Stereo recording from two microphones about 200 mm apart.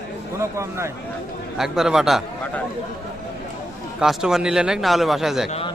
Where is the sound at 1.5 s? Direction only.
Centre (ahead or behind).